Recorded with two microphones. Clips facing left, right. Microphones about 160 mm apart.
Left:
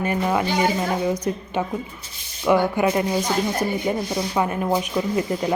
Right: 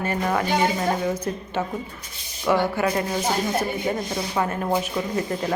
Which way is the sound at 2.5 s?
15° left (ahead or behind).